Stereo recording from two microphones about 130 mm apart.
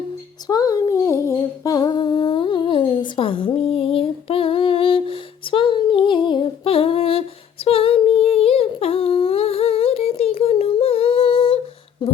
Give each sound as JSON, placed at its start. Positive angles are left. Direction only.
{"t": 0.4, "sound": "humming", "side_deg": 30}